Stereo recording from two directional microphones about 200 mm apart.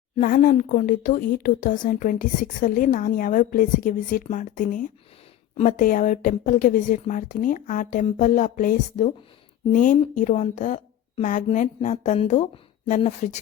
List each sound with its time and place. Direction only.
0.2 s speech: 40° left (ahead or behind)